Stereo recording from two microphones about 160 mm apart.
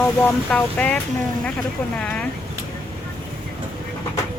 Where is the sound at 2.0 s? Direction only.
5° left (ahead or behind).